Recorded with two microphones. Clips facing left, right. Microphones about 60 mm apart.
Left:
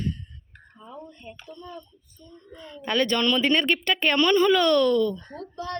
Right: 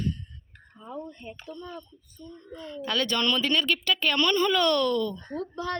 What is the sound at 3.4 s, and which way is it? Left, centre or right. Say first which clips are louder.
Speech: left 4 dB; left.